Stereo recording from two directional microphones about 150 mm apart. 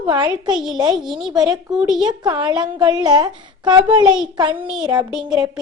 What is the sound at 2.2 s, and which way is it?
A woman's voice, 30° right (ahead or behind).